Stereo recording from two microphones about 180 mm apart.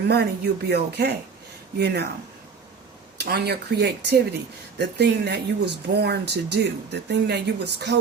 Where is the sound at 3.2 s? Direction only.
65° right (ahead or behind).